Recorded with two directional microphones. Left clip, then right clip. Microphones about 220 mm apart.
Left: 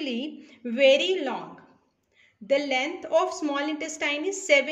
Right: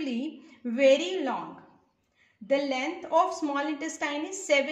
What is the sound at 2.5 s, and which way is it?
A woman's voice, 30° left (ahead or behind).